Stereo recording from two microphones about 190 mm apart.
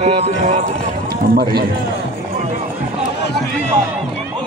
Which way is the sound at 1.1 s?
55° right (ahead or behind).